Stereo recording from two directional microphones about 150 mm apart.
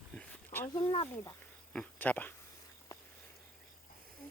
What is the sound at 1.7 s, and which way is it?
Speech, 10° left (ahead or behind).